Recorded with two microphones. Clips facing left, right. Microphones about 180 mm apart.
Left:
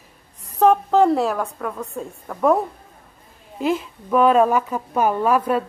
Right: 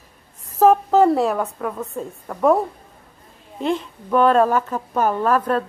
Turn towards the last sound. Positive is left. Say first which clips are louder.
# even
turn(degrees=10)  # may be behind; listen again after turning